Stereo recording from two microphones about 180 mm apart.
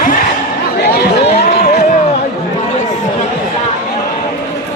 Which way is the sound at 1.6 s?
60° left (ahead or behind).